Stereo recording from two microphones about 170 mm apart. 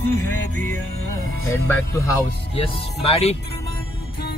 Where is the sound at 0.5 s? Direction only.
15° left (ahead or behind).